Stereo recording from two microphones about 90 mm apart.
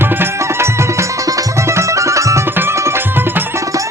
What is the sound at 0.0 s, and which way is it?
Music, 25° right (ahead or behind).